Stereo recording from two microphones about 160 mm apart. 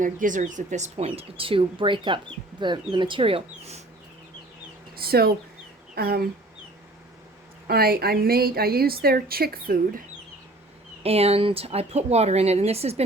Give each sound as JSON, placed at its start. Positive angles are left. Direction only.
{"t": 0.0, "sound": "speech", "side_deg": -55}
{"t": 4.9, "sound": "a woman's voice", "side_deg": -75}
{"t": 7.7, "sound": "a woman's voice", "side_deg": -70}
{"t": 11.0, "sound": "speech", "side_deg": -40}